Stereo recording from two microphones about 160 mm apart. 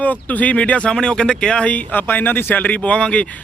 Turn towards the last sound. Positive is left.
turn(degrees=5)  # may be behind; listen again after turning